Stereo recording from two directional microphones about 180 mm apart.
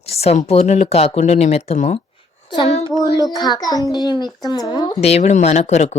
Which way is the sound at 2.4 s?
20° left (ahead or behind).